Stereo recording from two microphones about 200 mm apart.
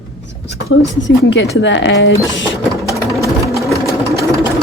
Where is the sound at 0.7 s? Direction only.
70° left (ahead or behind).